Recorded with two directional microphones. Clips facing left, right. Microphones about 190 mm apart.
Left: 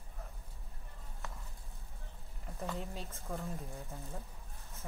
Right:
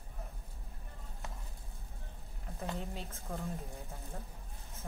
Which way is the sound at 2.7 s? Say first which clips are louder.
Right 1 dB; centre (ahead or behind).